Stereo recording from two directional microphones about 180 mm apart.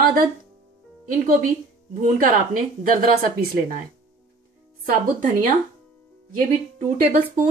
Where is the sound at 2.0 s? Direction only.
50° right (ahead or behind).